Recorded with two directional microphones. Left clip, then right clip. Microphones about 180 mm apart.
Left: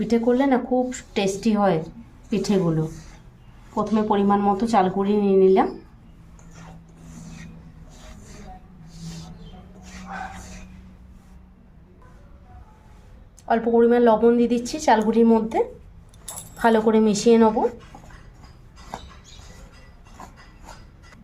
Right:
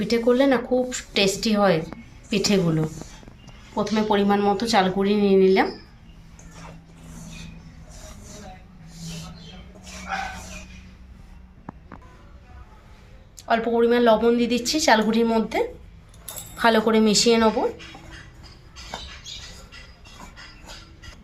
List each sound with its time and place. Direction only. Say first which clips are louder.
0.1 s speech: right 1 dB; 25° left (ahead or behind)
3.8 s speech: even; 25° left (ahead or behind)
13.4 s a woman's voice: left 2 dB; 35° left (ahead or behind)